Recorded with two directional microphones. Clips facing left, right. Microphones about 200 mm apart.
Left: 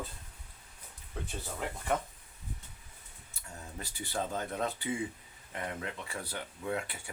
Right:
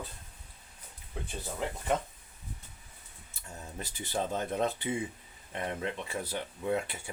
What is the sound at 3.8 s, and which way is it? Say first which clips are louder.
Speech: right 2 dB; 20° right (ahead or behind).